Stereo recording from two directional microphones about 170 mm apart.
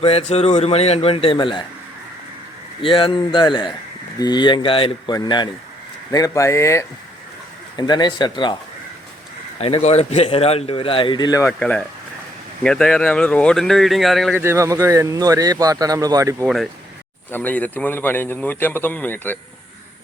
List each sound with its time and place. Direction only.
0.0 s speech: 40° left (ahead or behind)
2.8 s a man's voice: 30° left (ahead or behind)
9.6 s speech: 35° left (ahead or behind); by 11.5 s 20° left (ahead or behind)
11.6 s a man's voice: 5° left (ahead or behind)
14.4 s speech: 15° right (ahead or behind)
17.3 s a man's voice: 10° left (ahead or behind)